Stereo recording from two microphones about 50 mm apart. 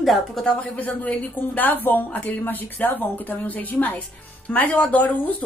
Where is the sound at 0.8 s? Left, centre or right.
Left.